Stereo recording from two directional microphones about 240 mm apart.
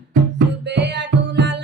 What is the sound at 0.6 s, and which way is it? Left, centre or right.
Music, right.